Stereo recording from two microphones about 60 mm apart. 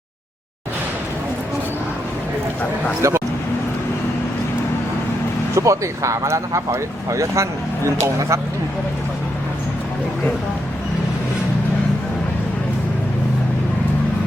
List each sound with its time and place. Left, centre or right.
3.0 s speech: right
5.5 s speech: right